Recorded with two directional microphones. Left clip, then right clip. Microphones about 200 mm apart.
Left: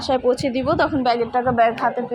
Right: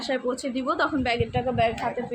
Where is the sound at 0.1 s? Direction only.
25° left (ahead or behind).